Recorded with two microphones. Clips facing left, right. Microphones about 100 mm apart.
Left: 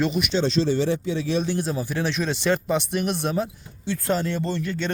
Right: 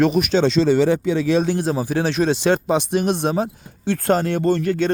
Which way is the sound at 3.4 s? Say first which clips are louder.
Right 4 dB; 65° right (ahead or behind).